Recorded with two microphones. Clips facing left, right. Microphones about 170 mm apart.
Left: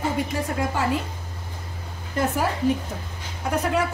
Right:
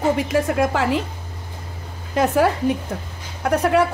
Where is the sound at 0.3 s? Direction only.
90° right.